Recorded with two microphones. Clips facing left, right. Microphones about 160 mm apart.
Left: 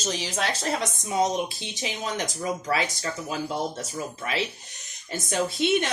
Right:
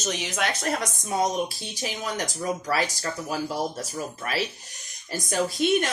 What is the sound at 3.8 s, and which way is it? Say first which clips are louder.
Speech: even; 20° left (ahead or behind).